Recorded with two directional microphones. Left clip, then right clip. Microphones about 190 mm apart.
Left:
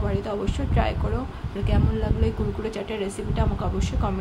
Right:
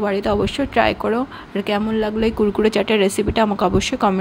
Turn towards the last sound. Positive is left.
turn(degrees=-50)  # may be behind; listen again after turning